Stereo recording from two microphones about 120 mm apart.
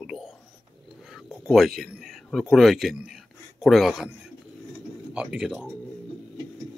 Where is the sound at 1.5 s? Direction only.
Centre (ahead or behind).